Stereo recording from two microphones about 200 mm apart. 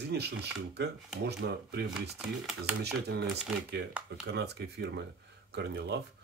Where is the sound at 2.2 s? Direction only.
5° right (ahead or behind).